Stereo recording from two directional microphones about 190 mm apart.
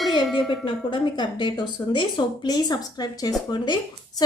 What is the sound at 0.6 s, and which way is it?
A woman's voice, 25° left (ahead or behind).